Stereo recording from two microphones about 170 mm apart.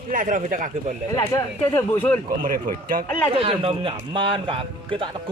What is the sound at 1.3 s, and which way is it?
Speech, 20° left (ahead or behind).